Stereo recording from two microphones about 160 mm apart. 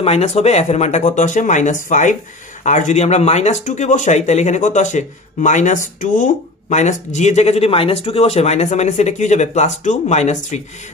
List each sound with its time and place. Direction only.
0.0 s speech: 40° left (ahead or behind)